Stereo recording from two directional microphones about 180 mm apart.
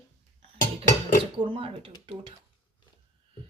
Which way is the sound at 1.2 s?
30° right (ahead or behind).